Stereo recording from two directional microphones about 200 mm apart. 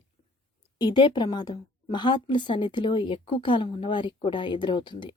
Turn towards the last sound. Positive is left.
turn(degrees=25)  # may be behind; listen again after turning